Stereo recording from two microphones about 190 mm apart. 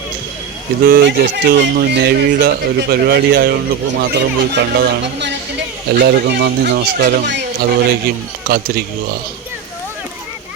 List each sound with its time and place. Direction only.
0.9 s speech: 55° right (ahead or behind)